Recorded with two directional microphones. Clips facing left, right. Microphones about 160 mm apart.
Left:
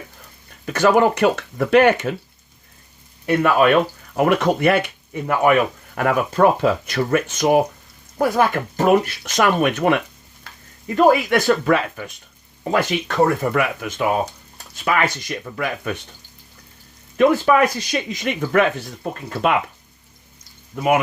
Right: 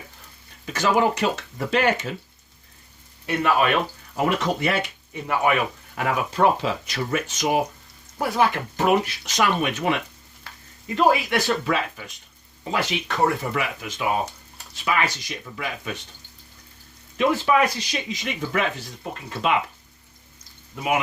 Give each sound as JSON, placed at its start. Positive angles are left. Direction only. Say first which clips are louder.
{"t": 0.6, "sound": "speech", "louder": "left 5 dB", "side_deg": 55}
{"t": 3.2, "sound": "speech", "louder": "left 6 dB", "side_deg": 50}
{"t": 17.2, "sound": "speech", "louder": "left 5 dB", "side_deg": 50}